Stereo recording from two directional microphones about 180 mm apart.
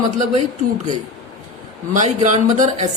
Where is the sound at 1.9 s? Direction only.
40° right (ahead or behind).